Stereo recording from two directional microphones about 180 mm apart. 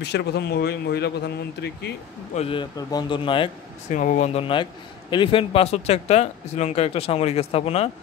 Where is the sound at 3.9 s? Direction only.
45° left (ahead or behind).